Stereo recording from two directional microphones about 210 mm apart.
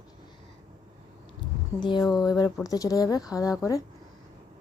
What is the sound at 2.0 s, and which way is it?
Speech, centre (ahead or behind).